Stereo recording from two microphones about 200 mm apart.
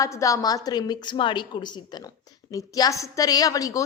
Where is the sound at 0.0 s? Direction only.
15° left (ahead or behind).